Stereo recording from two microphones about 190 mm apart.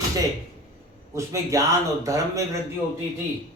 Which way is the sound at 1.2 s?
15° right (ahead or behind).